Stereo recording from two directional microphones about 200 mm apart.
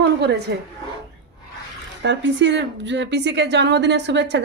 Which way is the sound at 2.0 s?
60° right (ahead or behind).